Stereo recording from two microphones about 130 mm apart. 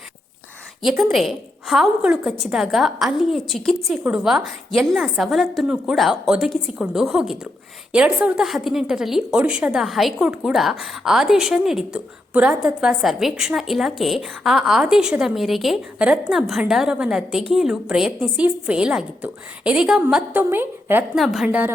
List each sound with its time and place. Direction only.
1.1 s a woman's voice: centre (ahead or behind)
20.4 s a woman's voice: 15° right (ahead or behind)
21.2 s a woman's voice: centre (ahead or behind)